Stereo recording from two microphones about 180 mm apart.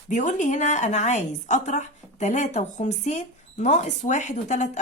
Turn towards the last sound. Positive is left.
turn(degrees=40)  # may be behind; listen again after turning